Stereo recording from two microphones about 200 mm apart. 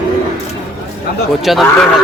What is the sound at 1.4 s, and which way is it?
Speech, centre (ahead or behind).